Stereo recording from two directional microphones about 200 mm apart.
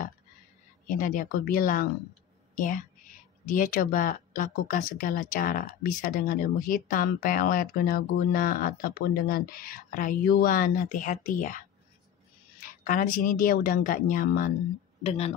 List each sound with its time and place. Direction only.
0.8 s a woman's voice: 45° left (ahead or behind)
12.6 s speech: 40° left (ahead or behind)
15.0 s speech: 30° left (ahead or behind)